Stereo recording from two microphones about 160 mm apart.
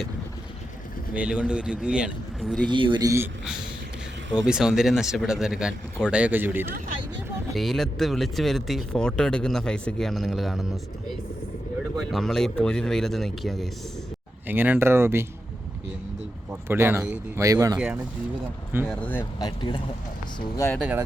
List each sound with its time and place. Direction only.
1.1 s a man's voice: 5° right (ahead or behind)
2.6 s speech: 30° right (ahead or behind)
4.4 s a man's voice: 5° right (ahead or behind)
7.5 s speech: centre (ahead or behind)
11.9 s speech: centre (ahead or behind)
14.4 s a man's voice: 10° right (ahead or behind)
16.5 s a man's voice: 15° right (ahead or behind)
17.7 s a man's voice: 5° right (ahead or behind)
18.9 s speech: 10° left (ahead or behind)
19.4 s speech: 30° left (ahead or behind)
20.7 s a man's voice: 5° right (ahead or behind)